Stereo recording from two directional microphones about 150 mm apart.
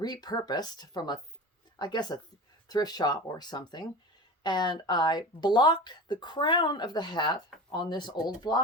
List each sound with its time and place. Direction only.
0.0 s speech: 25° left (ahead or behind)